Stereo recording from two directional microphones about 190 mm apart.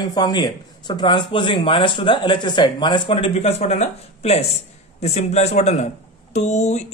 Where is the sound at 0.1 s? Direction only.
20° left (ahead or behind).